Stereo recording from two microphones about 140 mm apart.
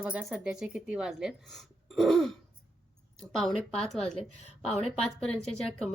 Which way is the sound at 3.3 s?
5° left (ahead or behind).